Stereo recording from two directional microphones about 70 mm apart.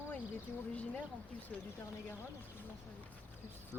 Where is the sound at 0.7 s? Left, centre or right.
Left.